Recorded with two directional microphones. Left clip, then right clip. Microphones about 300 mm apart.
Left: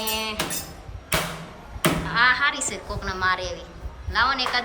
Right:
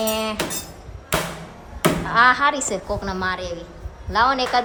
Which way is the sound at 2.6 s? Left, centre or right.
Centre.